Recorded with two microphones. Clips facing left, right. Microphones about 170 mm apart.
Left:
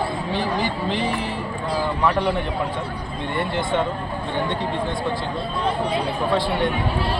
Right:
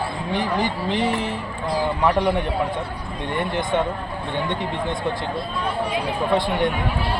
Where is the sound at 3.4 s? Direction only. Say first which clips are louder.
Even; 15° right (ahead or behind).